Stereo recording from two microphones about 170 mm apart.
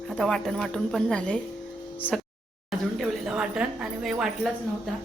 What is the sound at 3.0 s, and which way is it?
Speech, 5° right (ahead or behind).